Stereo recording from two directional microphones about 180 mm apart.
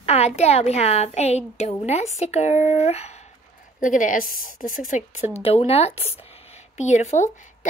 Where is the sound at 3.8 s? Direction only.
45° left (ahead or behind).